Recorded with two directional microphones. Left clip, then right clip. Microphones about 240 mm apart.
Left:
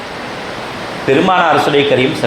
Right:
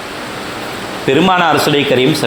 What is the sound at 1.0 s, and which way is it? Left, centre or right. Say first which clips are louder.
Speech: even; right.